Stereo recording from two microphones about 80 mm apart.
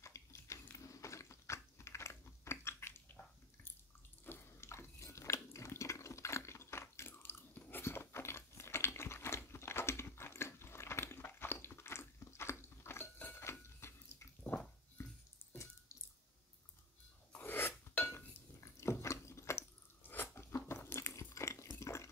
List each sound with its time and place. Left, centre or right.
0.0 s a sound: left
0.7 s typing: left
4.2 s a sound: left
14.5 s dog: left
15.0 s bathtub: left
15.5 s water: left
17.4 s filing: left
18.0 s dishes: left